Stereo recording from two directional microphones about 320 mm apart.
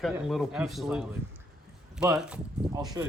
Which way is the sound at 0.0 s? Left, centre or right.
Centre.